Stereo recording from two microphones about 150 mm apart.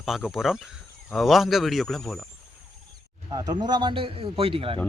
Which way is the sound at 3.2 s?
25° right (ahead or behind).